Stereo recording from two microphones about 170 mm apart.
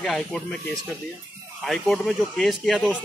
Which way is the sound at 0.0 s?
5° left (ahead or behind).